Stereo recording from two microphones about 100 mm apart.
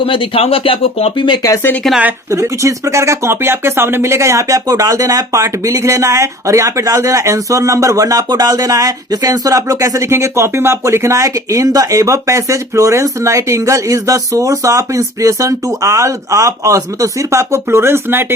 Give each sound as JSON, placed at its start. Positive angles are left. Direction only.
{"t": 0.0, "sound": "speech", "side_deg": 65}
{"t": 2.3, "sound": "speech", "side_deg": -30}